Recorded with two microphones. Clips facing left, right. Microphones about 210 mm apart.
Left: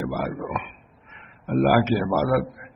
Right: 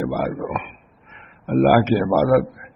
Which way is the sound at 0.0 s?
50° right (ahead or behind).